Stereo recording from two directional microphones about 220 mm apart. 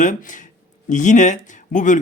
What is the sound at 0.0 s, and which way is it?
Speech, 35° left (ahead or behind).